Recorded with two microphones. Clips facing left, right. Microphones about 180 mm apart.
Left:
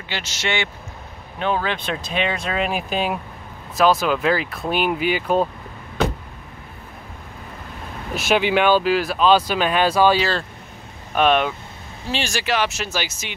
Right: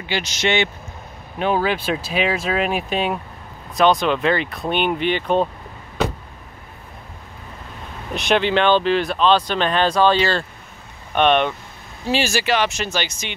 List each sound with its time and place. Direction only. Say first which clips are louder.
0.1 s a man's voice: right 5 dB; 15° right (ahead or behind); by 5.5 s 5° left (ahead or behind)
8.1 s speech: even; 5° left (ahead or behind)